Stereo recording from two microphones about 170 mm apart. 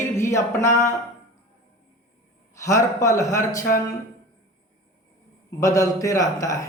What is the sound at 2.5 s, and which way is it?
A woman's voice, 20° left (ahead or behind).